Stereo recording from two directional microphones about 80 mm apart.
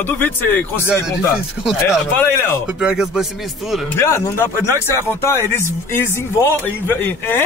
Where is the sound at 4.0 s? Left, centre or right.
Left.